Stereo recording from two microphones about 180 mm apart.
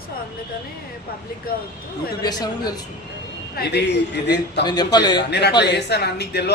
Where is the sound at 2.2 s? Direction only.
20° left (ahead or behind).